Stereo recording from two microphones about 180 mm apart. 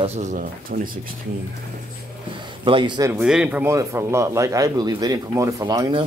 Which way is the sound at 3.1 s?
5° right (ahead or behind).